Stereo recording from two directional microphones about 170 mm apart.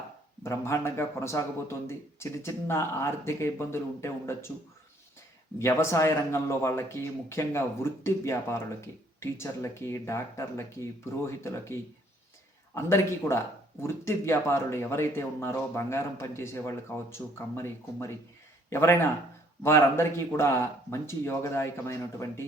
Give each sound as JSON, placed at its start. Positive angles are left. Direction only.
{"t": 0.4, "sound": "speech", "side_deg": 15}
{"t": 5.5, "sound": "speech", "side_deg": 15}